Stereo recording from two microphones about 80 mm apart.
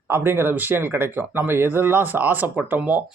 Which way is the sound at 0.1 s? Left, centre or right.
Right.